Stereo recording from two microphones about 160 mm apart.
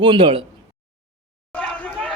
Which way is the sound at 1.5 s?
10° left (ahead or behind).